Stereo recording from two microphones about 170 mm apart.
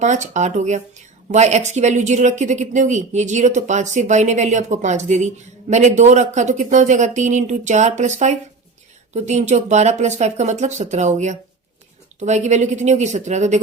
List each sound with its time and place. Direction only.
0.0 s a woman's voice: 45° right (ahead or behind)